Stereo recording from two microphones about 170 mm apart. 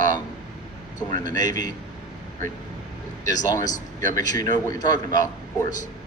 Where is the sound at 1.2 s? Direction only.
20° left (ahead or behind).